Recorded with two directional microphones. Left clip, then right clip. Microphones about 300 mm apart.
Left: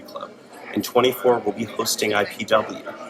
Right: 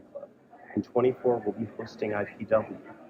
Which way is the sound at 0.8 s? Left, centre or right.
Centre.